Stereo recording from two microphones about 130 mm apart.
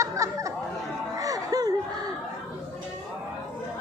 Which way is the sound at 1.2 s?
25° right (ahead or behind).